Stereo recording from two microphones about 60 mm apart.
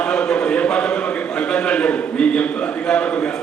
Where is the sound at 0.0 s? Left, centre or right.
Centre.